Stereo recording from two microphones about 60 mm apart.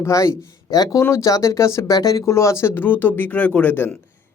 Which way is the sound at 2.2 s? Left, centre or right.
Left.